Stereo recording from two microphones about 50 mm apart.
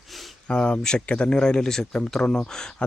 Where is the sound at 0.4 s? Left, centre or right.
Left.